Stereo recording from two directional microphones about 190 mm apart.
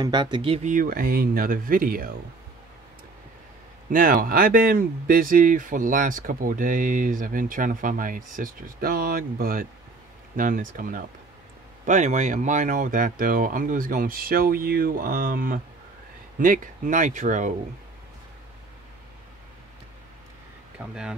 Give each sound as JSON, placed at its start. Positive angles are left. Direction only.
{"t": 0.0, "sound": "speech", "side_deg": -20}
{"t": 0.7, "sound": "speech", "side_deg": -45}
{"t": 3.9, "sound": "speech", "side_deg": -45}
{"t": 20.8, "sound": "speech", "side_deg": -5}